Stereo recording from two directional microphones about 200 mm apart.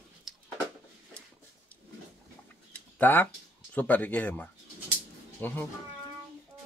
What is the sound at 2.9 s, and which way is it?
Speech, 10° left (ahead or behind).